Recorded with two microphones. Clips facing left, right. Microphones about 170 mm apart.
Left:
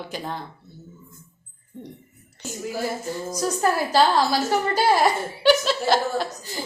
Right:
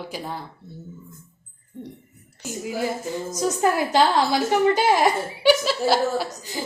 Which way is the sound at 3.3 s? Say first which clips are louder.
Right 1 dB; 15° right (ahead or behind).